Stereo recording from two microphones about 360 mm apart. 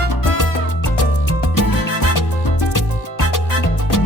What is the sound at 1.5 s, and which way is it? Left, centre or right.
Music, left.